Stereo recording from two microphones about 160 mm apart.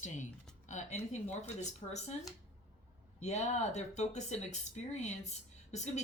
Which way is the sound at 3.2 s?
45° left (ahead or behind).